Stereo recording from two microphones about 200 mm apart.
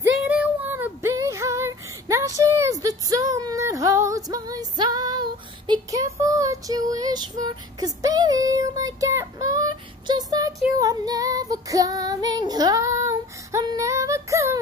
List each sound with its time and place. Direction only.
0.0 s female singing: 10° right (ahead or behind)